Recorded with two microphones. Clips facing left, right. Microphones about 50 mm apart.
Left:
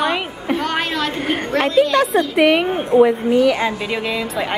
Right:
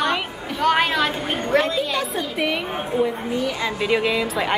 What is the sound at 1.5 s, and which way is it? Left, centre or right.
A woman's voice, left.